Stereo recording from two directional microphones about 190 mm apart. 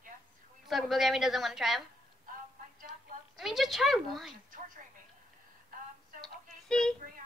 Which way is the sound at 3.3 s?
Centre (ahead or behind).